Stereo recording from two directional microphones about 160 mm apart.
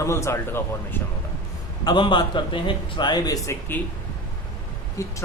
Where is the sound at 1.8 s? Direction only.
30° left (ahead or behind).